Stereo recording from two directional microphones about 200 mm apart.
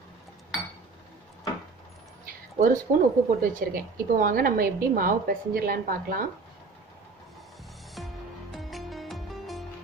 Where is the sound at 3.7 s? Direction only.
45° right (ahead or behind).